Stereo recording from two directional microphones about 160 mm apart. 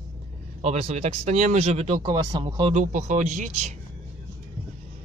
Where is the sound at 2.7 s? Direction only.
50° right (ahead or behind).